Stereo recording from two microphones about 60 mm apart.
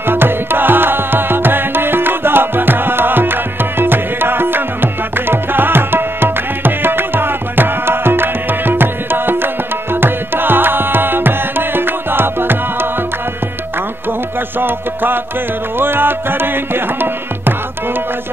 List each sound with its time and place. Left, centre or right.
0.0 s music: right
5.3 s tabla: right
9.9 s music: right
14.6 s music: right